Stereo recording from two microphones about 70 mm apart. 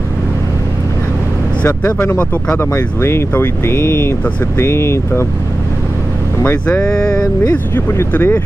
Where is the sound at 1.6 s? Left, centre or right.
Left.